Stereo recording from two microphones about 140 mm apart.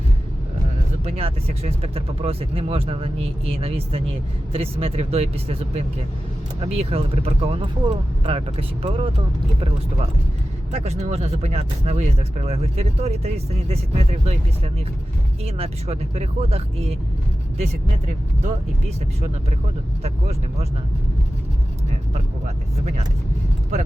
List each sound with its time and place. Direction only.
1.0 s speech: 45° right (ahead or behind)
20.0 s speech: 50° right (ahead or behind)